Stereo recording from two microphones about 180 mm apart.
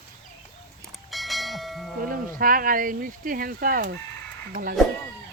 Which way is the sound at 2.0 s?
50° right (ahead or behind).